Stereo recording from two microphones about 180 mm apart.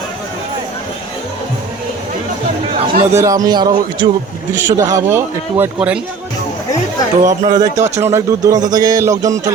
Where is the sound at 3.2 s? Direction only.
20° right (ahead or behind).